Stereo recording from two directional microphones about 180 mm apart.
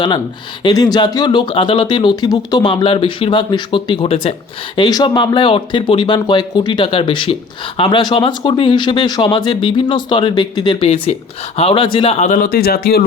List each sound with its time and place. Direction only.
0.6 s speech: 25° left (ahead or behind); by 13.1 s 60° left (ahead or behind)